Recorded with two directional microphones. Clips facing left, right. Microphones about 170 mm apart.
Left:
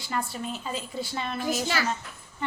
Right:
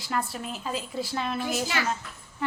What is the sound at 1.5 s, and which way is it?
Speech, 35° left (ahead or behind).